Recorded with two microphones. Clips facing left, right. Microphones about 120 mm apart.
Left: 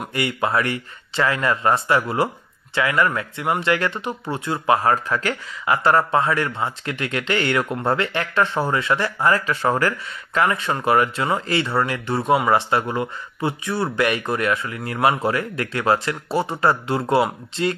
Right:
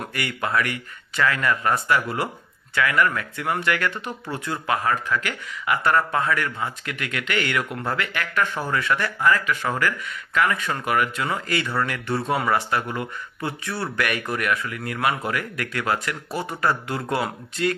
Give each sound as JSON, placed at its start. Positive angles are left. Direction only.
{"t": 0.0, "sound": "speech", "side_deg": 25}